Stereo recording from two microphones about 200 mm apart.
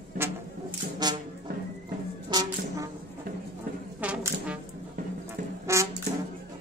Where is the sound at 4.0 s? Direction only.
5° right (ahead or behind).